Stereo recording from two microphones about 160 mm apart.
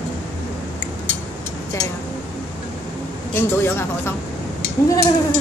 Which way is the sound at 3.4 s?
15° left (ahead or behind).